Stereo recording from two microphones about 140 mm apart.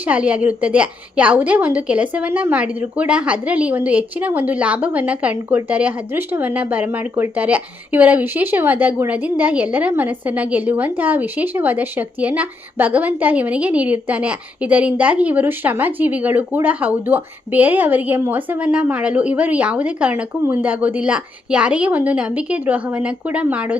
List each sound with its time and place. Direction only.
0.0 s a woman's voice: 10° right (ahead or behind)